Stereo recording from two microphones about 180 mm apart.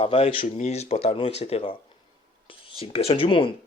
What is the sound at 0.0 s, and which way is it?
Speech, 30° left (ahead or behind).